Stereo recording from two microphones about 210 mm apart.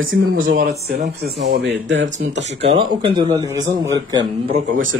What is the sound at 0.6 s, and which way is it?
Speech, 50° right (ahead or behind).